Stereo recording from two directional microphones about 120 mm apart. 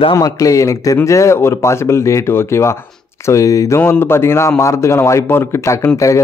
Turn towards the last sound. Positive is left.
turn(degrees=25)  # may be behind; listen again after turning